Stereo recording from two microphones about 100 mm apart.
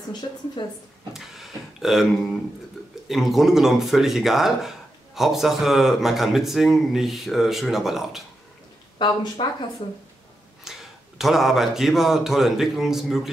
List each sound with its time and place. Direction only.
0.6 s speech: 50° left (ahead or behind)
1.1 s a sound: 5° right (ahead or behind)
3.1 s speech: 5° right (ahead or behind)
8.9 s speech: 50° left (ahead or behind)
10.6 s speech: 5° right (ahead or behind)